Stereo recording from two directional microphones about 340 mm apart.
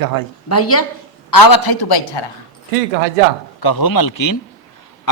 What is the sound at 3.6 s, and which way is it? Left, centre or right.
Speech, left.